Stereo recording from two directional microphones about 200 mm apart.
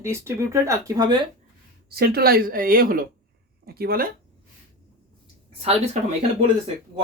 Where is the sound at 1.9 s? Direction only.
50° right (ahead or behind).